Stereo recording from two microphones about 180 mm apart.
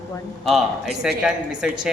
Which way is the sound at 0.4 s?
Centre (ahead or behind).